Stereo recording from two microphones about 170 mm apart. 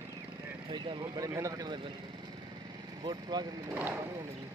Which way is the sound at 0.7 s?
20° right (ahead or behind).